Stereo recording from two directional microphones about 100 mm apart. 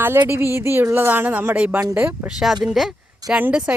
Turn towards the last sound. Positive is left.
turn(degrees=-10)  # may be behind; listen again after turning